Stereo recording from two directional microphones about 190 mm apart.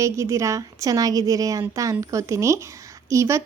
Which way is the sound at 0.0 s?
15° right (ahead or behind).